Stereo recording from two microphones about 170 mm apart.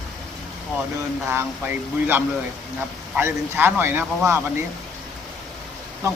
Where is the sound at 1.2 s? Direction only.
10° right (ahead or behind).